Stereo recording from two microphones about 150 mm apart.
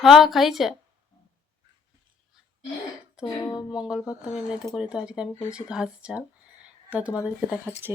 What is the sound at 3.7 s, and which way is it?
Speech, 5° right (ahead or behind).